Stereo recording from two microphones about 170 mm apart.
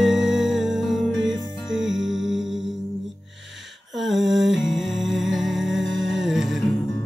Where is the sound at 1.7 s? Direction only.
90° right.